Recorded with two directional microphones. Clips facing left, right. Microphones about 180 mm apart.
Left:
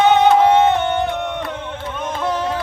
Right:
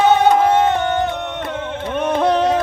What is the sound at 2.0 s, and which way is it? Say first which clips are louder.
Music: right 7 dB; 65° right (ahead or behind).